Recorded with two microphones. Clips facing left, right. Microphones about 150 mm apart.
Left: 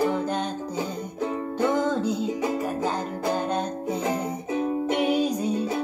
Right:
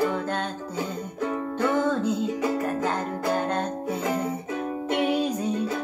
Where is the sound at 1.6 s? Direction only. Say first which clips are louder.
Left 1 dB; 15° left (ahead or behind).